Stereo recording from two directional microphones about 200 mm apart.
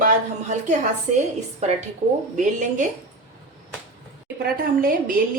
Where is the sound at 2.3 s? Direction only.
40° right (ahead or behind).